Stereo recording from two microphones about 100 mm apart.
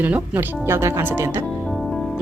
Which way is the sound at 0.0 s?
20° right (ahead or behind).